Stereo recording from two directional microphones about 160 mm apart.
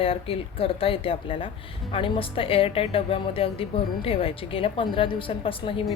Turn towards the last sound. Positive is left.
turn(degrees=35)  # may be behind; listen again after turning